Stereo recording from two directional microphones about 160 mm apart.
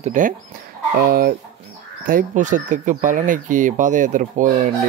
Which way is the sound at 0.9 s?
65° right (ahead or behind).